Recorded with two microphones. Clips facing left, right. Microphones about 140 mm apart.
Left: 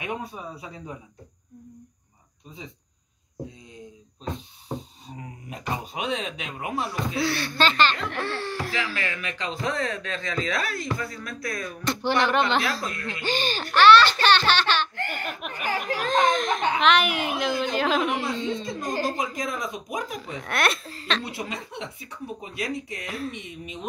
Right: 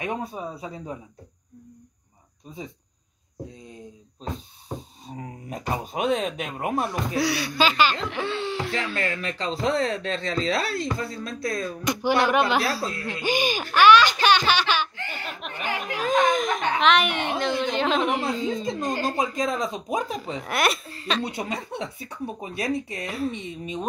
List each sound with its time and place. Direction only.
0.0 s speech: 35° right (ahead or behind)
5.0 s speech: 45° right (ahead or behind)
7.2 s a woman's voice: 10° right (ahead or behind)
8.7 s speech: 30° right (ahead or behind)
11.8 s a woman's voice: 10° right (ahead or behind)
12.8 s speech: 30° right (ahead or behind)
13.1 s a child's voice: 10° right (ahead or behind)
15.0 s speech: 50° left (ahead or behind)
16.0 s a child's voice: 5° right (ahead or behind)
18.7 s speech: 20° right (ahead or behind)
20.4 s a child's voice: centre (ahead or behind)
21.2 s speech: 25° right (ahead or behind)
23.0 s a child's voice: centre (ahead or behind)
23.3 s speech: 30° right (ahead or behind)